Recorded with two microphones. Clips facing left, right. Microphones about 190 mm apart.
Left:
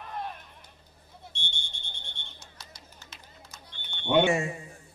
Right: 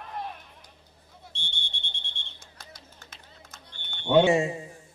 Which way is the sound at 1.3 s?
30° right (ahead or behind).